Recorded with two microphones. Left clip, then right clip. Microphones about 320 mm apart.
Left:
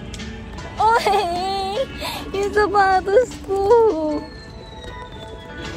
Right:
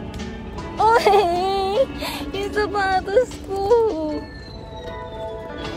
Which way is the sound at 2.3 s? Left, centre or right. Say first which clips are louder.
Left 6 dB; centre.